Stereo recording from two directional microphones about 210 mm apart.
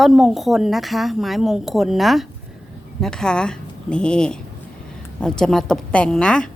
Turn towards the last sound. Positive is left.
turn(degrees=5)  # may be behind; listen again after turning